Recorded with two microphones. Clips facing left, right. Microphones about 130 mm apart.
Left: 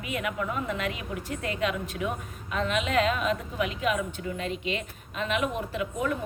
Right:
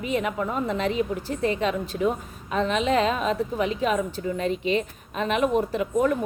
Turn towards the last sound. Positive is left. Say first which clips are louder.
# right 7 dB
turn(degrees=-45)  # may be behind; listen again after turning